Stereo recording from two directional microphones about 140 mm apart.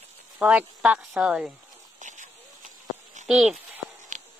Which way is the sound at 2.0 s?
60° right (ahead or behind).